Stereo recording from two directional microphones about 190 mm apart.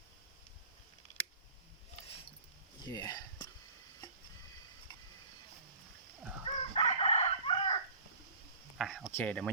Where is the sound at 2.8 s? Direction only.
20° left (ahead or behind).